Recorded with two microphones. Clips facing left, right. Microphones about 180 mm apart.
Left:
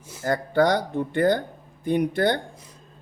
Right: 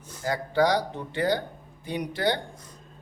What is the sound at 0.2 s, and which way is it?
Speech, 50° left (ahead or behind).